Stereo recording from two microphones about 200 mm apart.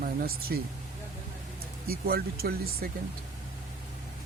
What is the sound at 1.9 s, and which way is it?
Speech, 50° right (ahead or behind).